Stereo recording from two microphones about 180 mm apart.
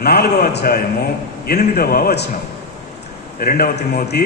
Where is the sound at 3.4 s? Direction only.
55° left (ahead or behind).